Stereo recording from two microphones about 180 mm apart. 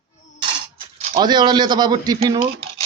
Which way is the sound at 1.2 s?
25° right (ahead or behind).